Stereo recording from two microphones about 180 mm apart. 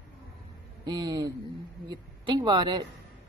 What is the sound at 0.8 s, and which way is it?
A woman's voice, 25° right (ahead or behind).